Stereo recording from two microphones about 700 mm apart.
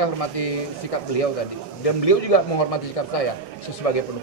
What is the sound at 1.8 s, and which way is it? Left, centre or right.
A man's voice, left.